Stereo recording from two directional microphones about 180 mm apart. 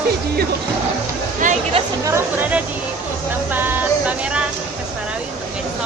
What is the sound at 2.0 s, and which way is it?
Chatter, 15° right (ahead or behind).